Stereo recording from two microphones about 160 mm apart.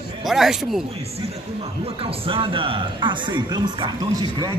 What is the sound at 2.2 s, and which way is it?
Speech, 35° right (ahead or behind).